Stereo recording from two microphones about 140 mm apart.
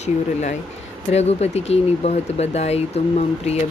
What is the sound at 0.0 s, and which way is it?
Speech, 55° left (ahead or behind).